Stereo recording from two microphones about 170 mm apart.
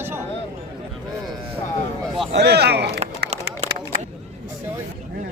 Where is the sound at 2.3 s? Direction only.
75° right (ahead or behind).